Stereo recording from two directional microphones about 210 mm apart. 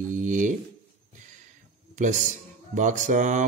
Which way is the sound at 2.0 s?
35° right (ahead or behind).